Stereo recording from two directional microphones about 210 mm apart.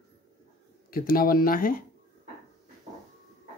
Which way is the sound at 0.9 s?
45° left (ahead or behind).